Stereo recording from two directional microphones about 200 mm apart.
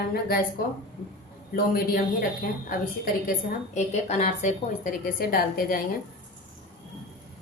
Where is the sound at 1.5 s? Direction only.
45° left (ahead or behind).